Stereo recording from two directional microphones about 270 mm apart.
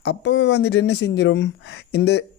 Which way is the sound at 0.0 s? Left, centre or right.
Left.